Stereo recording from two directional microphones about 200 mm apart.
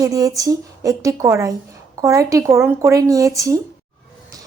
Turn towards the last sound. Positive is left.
turn(degrees=-15)  # may be behind; listen again after turning